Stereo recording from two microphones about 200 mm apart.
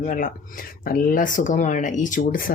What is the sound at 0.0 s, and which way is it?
Speech, 40° left (ahead or behind).